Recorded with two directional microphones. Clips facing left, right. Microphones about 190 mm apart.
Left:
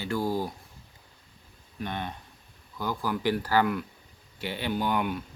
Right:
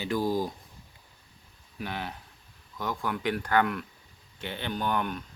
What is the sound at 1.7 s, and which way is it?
Speech, 5° right (ahead or behind).